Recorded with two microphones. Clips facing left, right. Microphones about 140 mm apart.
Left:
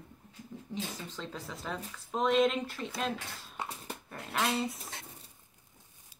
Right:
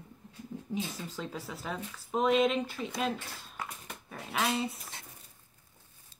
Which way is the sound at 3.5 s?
30° left (ahead or behind).